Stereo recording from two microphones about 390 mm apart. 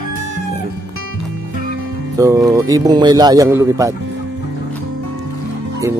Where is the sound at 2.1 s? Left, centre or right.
Centre.